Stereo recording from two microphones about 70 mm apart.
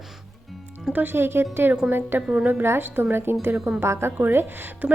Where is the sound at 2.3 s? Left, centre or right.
Centre.